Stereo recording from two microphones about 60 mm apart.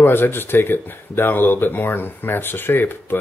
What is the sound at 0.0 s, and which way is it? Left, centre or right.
Speech, left.